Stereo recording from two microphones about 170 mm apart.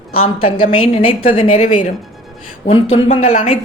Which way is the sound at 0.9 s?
35° left (ahead or behind).